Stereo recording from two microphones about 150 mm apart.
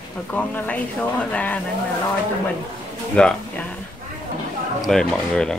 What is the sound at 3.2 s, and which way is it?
Speech, 5° left (ahead or behind).